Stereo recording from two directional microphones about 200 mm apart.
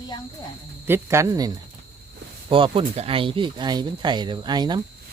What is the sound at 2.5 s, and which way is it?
Speech, 25° right (ahead or behind).